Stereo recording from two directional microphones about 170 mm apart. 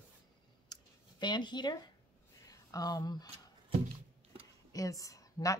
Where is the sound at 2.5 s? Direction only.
20° left (ahead or behind).